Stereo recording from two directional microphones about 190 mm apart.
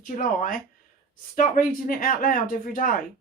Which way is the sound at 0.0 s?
45° left (ahead or behind).